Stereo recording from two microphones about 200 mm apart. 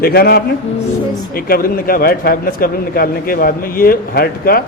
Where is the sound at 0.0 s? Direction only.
50° left (ahead or behind).